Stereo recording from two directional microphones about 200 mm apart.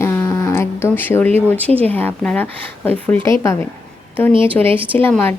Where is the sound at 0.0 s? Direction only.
15° left (ahead or behind).